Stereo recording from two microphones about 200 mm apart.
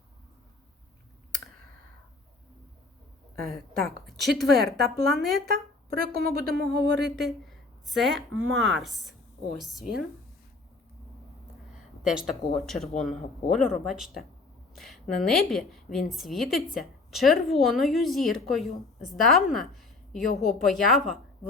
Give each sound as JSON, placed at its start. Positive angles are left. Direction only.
{"t": 3.5, "sound": "a woman's voice", "side_deg": 0}
{"t": 6.1, "sound": "speech", "side_deg": -50}
{"t": 7.2, "sound": "a woman's voice", "side_deg": 0}
{"t": 12.0, "sound": "a woman's voice", "side_deg": 0}